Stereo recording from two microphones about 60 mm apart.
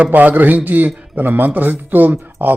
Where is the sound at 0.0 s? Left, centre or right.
Right.